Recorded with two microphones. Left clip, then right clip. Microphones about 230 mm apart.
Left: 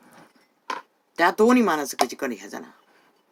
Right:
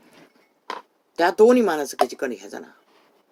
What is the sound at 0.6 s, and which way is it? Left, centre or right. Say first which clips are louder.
Speech: left 2 dB; left.